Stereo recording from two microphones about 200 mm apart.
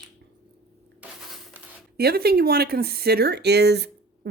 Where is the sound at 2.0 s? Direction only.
50° right (ahead or behind).